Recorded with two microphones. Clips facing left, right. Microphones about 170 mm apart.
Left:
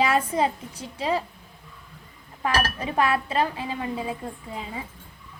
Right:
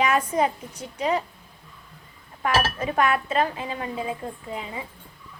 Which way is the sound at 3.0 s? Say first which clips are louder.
Right 1 dB; 30° left (ahead or behind).